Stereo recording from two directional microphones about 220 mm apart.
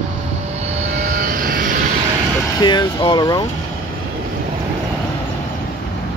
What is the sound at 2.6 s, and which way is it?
Speech, 20° left (ahead or behind).